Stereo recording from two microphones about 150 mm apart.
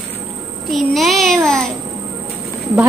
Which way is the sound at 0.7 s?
Centre (ahead or behind).